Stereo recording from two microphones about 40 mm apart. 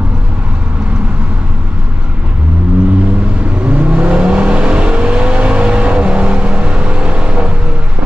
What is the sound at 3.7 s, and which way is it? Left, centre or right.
Vehicle, right.